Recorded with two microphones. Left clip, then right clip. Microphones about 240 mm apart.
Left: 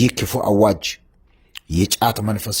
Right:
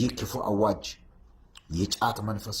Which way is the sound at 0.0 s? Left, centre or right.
Left.